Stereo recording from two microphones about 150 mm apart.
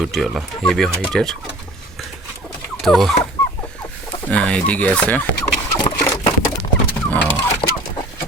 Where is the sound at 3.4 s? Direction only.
15° left (ahead or behind).